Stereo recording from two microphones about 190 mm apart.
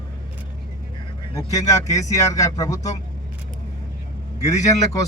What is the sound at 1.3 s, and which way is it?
Speech, 15° left (ahead or behind).